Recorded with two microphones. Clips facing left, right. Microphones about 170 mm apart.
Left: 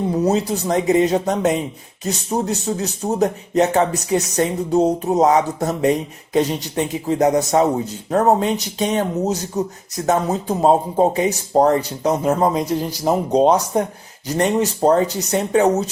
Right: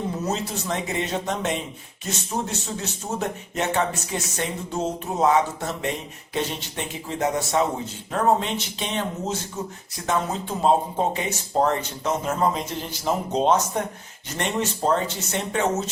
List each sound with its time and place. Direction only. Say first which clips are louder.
0.2 s speech: left 9 dB; 35° left (ahead or behind)